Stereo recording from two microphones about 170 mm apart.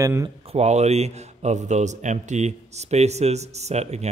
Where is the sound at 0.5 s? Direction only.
40° right (ahead or behind).